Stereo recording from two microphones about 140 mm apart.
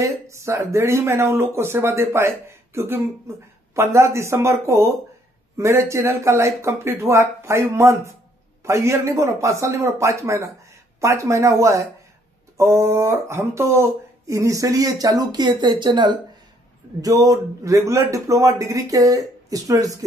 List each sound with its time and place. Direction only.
0.0 s speech: 20° right (ahead or behind)